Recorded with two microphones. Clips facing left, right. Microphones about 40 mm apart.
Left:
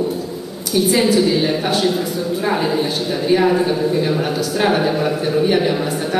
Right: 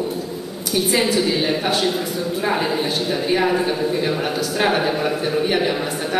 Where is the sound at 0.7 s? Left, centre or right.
Right.